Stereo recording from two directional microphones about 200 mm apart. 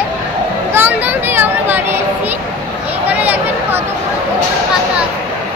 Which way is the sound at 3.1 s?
10° right (ahead or behind).